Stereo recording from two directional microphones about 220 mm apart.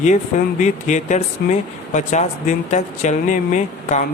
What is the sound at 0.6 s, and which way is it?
Speech, 35° left (ahead or behind).